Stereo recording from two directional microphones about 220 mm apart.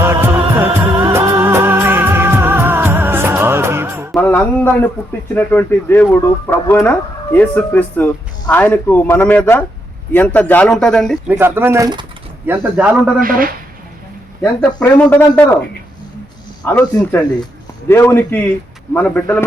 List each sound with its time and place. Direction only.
0.0 s music: 10° right (ahead or behind)
4.1 s a sound: 10° left (ahead or behind)
5.3 s a man's voice: 10° left (ahead or behind)
11.3 s speech: 10° right (ahead or behind)
13.1 s a man's voice: 40° right (ahead or behind)
14.8 s speech: 10° left (ahead or behind)
16.6 s speech: 10° left (ahead or behind)